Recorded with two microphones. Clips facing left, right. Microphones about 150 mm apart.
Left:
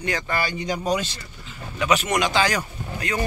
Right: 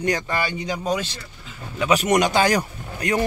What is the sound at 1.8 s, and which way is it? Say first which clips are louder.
Speech: right 3 dB; 35° right (ahead or behind).